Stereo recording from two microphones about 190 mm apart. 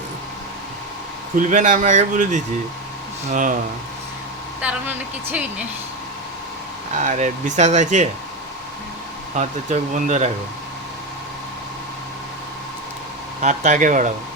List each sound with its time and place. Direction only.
1.4 s speech: 40° right (ahead or behind)
4.6 s a woman's voice: 10° right (ahead or behind)
6.9 s speech: 40° right (ahead or behind)
9.3 s speech: 40° right (ahead or behind)
13.4 s speech: 40° right (ahead or behind)